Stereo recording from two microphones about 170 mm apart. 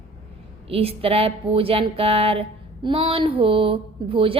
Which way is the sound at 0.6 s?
35° right (ahead or behind).